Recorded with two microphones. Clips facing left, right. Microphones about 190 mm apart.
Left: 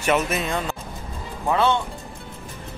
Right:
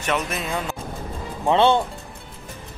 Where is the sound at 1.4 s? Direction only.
25° right (ahead or behind).